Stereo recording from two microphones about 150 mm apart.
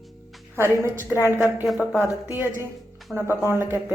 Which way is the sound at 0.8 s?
15° right (ahead or behind).